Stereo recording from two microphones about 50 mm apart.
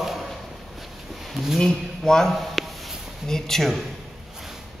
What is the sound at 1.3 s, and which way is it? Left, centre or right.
Speech, centre.